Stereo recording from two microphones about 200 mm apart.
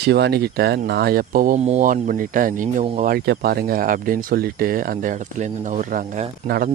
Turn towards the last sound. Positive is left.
turn(degrees=-50)  # may be behind; listen again after turning